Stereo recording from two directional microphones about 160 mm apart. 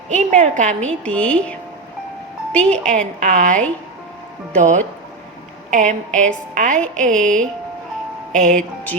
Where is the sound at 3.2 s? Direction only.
55° right (ahead or behind).